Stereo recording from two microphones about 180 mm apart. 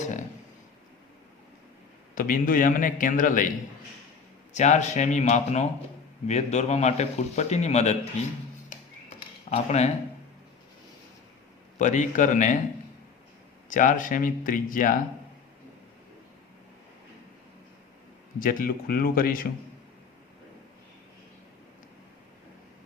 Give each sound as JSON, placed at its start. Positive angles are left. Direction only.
{"t": 0.0, "sound": "a sound", "side_deg": 45}
{"t": 2.1, "sound": "a man's voice", "side_deg": 50}
{"t": 4.5, "sound": "a man's voice", "side_deg": 40}
{"t": 9.5, "sound": "a man's voice", "side_deg": 40}
{"t": 11.8, "sound": "a man's voice", "side_deg": 40}
{"t": 13.7, "sound": "a man's voice", "side_deg": 45}
{"t": 18.3, "sound": "a man's voice", "side_deg": 50}